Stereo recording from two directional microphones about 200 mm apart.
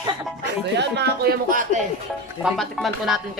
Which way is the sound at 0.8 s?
55° right (ahead or behind).